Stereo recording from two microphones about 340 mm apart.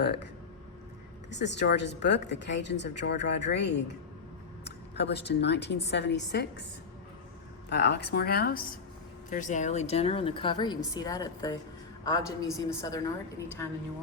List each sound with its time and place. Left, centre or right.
1.3 s a woman's voice: left
7.7 s a woman's voice: left; by 13.0 s centre